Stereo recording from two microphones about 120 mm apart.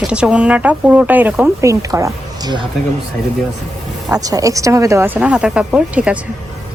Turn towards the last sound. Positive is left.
turn(degrees=-10)  # may be behind; listen again after turning